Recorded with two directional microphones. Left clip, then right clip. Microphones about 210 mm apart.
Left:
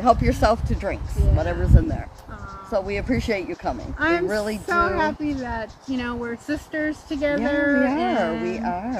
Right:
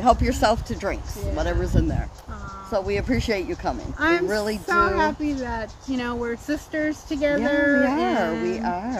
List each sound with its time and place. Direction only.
0.0 s speech: centre (ahead or behind)
4.0 s speech: 20° right (ahead or behind)
4.3 s speech: 5° right (ahead or behind)
4.9 s speech: 20° right (ahead or behind)
8.5 s speech: 5° right (ahead or behind)